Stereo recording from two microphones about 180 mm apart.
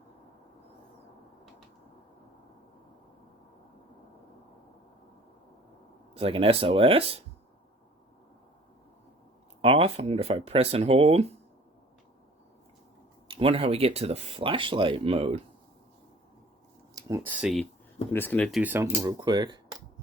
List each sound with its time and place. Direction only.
6.1 s speech: 30° right (ahead or behind)
9.6 s speech: 35° right (ahead or behind)
13.2 s speech: 30° right (ahead or behind)
16.9 s speech: 15° right (ahead or behind)
18.1 s speech: 10° left (ahead or behind)
18.6 s speech: 10° right (ahead or behind)